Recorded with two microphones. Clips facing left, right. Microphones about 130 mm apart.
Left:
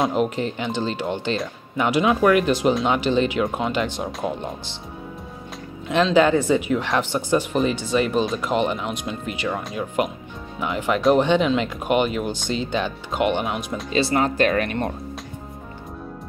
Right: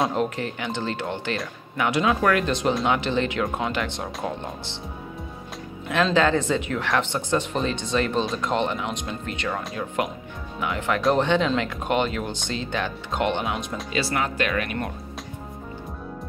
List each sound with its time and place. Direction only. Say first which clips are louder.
0.1 s speech: left 3 dB; 20° left (ahead or behind)
6.1 s speech: left 5 dB; 15° left (ahead or behind)
13.9 s speech: left 6 dB; 30° left (ahead or behind)